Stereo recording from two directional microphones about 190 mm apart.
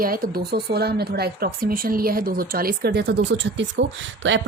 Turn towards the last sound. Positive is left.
turn(degrees=-70)  # may be behind; listen again after turning